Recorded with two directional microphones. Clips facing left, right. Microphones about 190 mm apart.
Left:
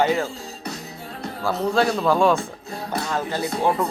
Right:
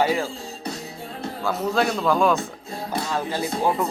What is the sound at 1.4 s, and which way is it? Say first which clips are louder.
Speech: left 2 dB; centre (ahead or behind).